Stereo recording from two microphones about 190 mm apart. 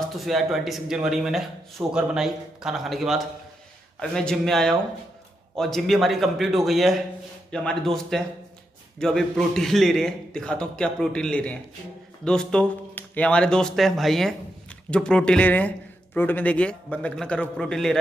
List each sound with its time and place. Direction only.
0.2 s a man's voice: centre (ahead or behind)